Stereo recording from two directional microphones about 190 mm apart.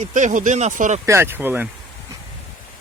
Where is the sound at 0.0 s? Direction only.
40° right (ahead or behind).